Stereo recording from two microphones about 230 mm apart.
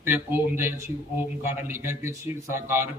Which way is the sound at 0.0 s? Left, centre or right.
Centre.